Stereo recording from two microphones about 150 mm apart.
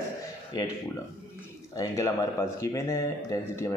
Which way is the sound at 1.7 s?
20° left (ahead or behind).